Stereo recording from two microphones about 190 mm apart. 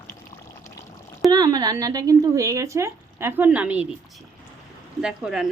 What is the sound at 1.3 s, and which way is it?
Speech, 20° right (ahead or behind).